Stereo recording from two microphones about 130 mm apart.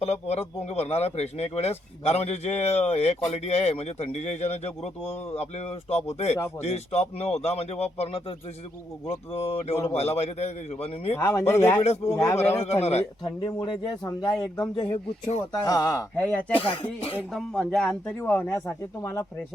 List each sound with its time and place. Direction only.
0.0 s a man's voice: 55° left (ahead or behind)
11.2 s speech: 20° left (ahead or behind)
12.4 s speech: 55° left (ahead or behind)
13.2 s speech: 35° left (ahead or behind)
16.6 s a man's voice: 45° left (ahead or behind)
17.3 s speech: 5° left (ahead or behind)
18.2 s speech: 15° left (ahead or behind)